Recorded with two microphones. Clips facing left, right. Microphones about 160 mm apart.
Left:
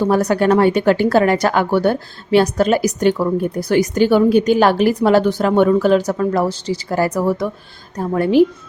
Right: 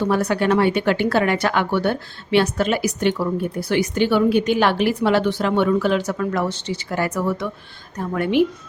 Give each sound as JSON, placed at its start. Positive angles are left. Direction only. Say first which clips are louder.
{"t": 0.0, "sound": "speech", "louder": "left 4 dB", "side_deg": 40}